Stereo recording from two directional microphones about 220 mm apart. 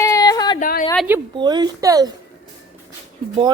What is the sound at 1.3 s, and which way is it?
Speech, 20° right (ahead or behind).